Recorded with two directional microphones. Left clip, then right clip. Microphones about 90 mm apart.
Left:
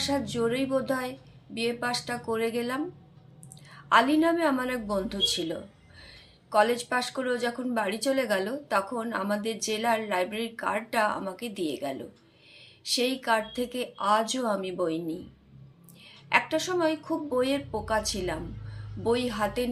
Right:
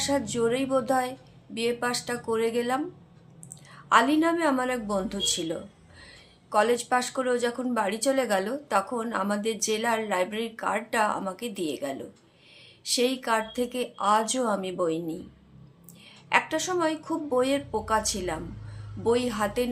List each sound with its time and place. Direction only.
0.0 s a woman's voice: 30° right (ahead or behind)